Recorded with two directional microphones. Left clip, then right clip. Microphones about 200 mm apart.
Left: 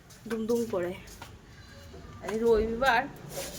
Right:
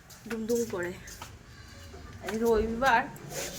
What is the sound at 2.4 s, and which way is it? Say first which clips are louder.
Speech: left 1 dB; 10° left (ahead or behind).